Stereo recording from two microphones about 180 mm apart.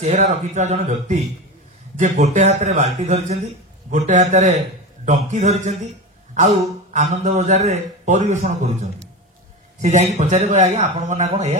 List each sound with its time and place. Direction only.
0.0 s a man's voice: 40° right (ahead or behind)
6.9 s a man's voice: 45° right (ahead or behind)